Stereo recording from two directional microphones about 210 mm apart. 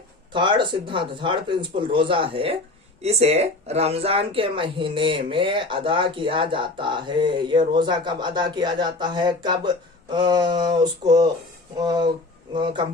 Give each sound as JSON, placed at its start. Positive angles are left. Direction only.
{"t": 0.3, "sound": "speech", "side_deg": -25}